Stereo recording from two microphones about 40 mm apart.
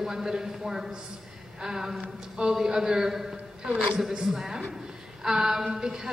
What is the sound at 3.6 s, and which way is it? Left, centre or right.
Speech, right.